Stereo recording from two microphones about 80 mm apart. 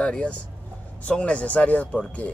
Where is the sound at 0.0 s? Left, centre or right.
Centre.